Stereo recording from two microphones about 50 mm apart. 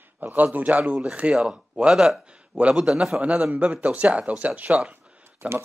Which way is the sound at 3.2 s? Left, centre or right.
Right.